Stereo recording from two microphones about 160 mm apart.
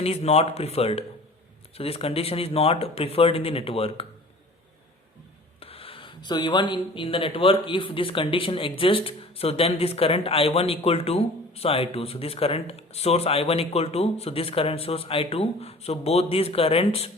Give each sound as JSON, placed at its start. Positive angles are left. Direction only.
{"t": 0.0, "sound": "a man's voice", "side_deg": 40}
{"t": 5.5, "sound": "a man's voice", "side_deg": 35}